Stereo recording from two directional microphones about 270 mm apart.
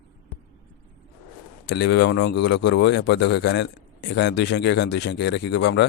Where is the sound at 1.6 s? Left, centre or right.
Left.